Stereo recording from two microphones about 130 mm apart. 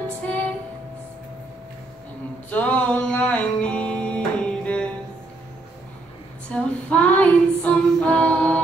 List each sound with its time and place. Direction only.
2.5 s music: 10° left (ahead or behind)
6.5 s female singing: 10° left (ahead or behind)